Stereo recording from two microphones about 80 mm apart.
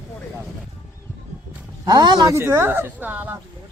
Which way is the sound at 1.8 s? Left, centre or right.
Right.